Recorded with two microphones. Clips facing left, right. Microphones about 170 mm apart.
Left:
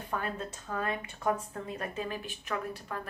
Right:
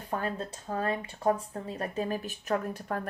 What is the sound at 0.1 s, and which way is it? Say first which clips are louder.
Speech: right 3 dB; 35° right (ahead or behind).